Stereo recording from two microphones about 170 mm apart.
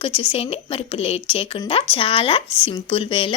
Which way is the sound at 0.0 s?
30° left (ahead or behind).